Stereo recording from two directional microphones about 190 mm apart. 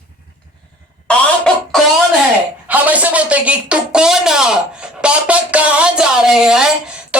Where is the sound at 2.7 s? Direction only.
10° right (ahead or behind).